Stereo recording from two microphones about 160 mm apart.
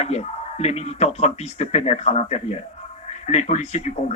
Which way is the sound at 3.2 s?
45° left (ahead or behind).